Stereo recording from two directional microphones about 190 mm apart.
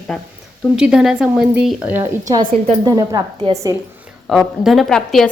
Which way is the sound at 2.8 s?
20° right (ahead or behind).